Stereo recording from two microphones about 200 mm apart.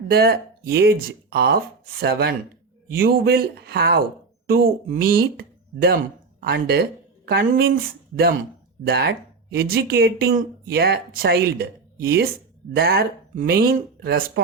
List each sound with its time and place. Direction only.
0.1 s speech: 50° right (ahead or behind)
8.9 s speech: 55° right (ahead or behind)